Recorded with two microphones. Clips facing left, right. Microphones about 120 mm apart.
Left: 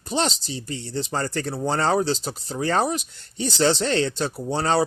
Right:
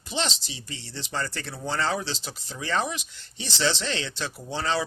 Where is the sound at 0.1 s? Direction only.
45° left (ahead or behind).